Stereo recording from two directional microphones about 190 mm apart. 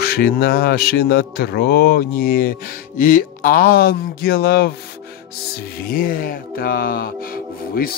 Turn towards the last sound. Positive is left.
turn(degrees=50)  # may be behind; listen again after turning